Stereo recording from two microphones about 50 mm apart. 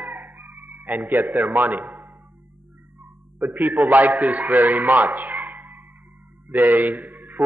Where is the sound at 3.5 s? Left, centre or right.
Right.